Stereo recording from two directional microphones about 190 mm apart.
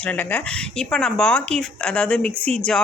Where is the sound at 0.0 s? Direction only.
10° left (ahead or behind).